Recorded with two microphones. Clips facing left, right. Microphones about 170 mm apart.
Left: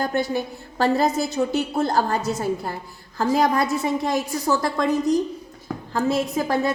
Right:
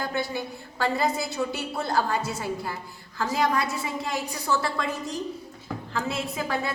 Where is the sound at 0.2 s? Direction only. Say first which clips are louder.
Left 6 dB; 45° left (ahead or behind).